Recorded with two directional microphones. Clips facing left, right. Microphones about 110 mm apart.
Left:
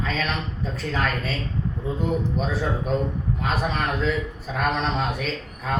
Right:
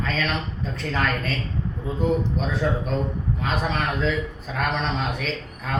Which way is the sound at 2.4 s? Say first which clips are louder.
Right 1 dB; 5° left (ahead or behind).